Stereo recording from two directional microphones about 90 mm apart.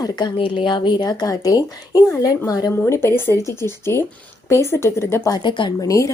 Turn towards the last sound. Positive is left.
turn(degrees=40)  # may be behind; listen again after turning